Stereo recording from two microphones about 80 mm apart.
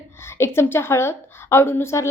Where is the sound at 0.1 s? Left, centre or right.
Left.